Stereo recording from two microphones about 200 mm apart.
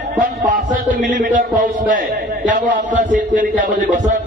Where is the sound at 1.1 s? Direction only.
40° right (ahead or behind).